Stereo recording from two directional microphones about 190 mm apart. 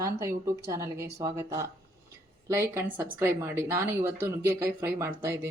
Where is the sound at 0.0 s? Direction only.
15° right (ahead or behind).